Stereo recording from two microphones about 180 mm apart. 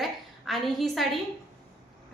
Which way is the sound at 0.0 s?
Centre (ahead or behind).